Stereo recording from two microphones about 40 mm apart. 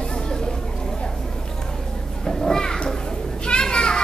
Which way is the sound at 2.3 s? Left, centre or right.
Centre.